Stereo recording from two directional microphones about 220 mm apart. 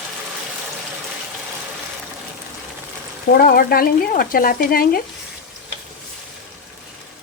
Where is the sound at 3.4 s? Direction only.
40° left (ahead or behind).